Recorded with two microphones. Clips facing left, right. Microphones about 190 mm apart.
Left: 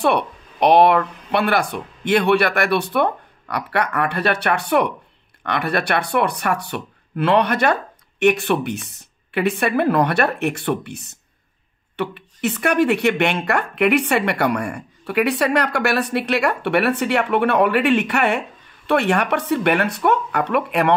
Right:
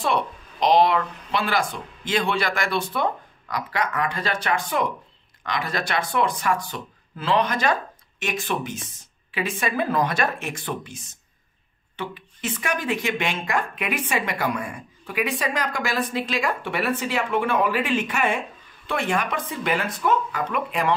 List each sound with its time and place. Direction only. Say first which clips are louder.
0.0 s speech: left 5 dB; 65° left (ahead or behind)